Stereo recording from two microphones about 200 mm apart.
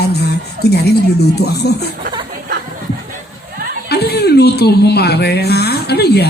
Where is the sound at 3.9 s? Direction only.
55° left (ahead or behind).